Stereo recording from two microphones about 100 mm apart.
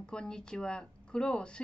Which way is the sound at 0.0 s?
10° left (ahead or behind).